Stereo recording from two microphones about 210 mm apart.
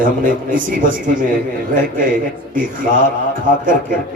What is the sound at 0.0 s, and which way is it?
A man's voice, 40° right (ahead or behind).